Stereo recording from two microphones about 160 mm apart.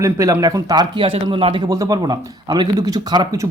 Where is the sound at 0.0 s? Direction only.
20° right (ahead or behind); by 1.6 s 35° right (ahead or behind).